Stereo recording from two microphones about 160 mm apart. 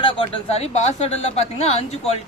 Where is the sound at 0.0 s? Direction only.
35° left (ahead or behind).